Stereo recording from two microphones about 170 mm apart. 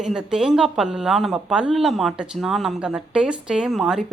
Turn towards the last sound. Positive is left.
turn(degrees=0)  # may be behind; listen again after turning